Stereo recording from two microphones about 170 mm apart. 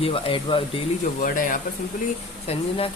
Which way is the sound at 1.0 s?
55° left (ahead or behind).